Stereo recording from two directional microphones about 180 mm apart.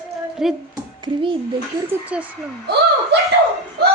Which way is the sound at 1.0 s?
30° right (ahead or behind).